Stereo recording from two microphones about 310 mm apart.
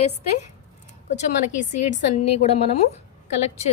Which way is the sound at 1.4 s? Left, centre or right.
Left.